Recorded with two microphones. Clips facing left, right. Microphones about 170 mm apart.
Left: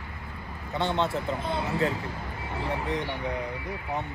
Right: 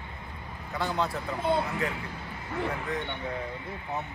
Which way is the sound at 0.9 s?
Centre (ahead or behind).